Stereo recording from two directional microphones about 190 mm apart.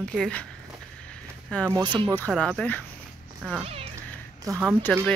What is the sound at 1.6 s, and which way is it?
Speech, 20° right (ahead or behind).